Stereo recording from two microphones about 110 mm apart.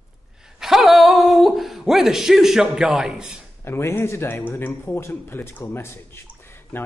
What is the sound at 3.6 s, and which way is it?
Speech, 20° left (ahead or behind).